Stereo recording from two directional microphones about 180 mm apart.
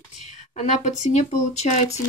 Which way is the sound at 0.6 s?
40° left (ahead or behind).